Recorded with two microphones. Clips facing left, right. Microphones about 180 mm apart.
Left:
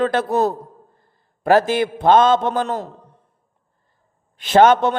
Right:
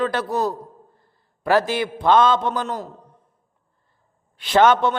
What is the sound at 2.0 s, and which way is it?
Speech, 50° left (ahead or behind).